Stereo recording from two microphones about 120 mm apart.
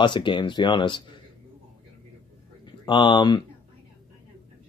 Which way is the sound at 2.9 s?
40° left (ahead or behind).